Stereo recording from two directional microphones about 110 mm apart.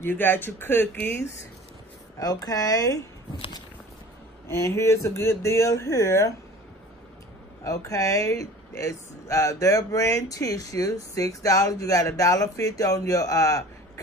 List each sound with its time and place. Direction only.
0.0 s speech: 20° left (ahead or behind)
2.1 s speech: 35° left (ahead or behind)
4.5 s speech: 30° left (ahead or behind)
7.6 s speech: 30° left (ahead or behind)